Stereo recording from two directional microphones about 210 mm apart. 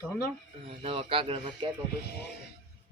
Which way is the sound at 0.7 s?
25° right (ahead or behind).